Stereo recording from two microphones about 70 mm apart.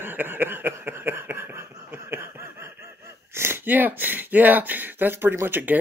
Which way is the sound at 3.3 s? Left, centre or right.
Right.